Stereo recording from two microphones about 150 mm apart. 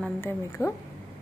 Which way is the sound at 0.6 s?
20° left (ahead or behind).